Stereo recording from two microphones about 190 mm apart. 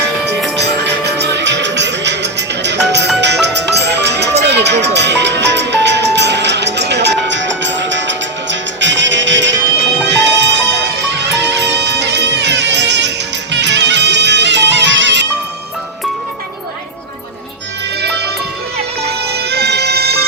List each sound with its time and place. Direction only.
0.3 s music: centre (ahead or behind)
0.6 s music: 65° right (ahead or behind)
19.0 s music: 60° right (ahead or behind)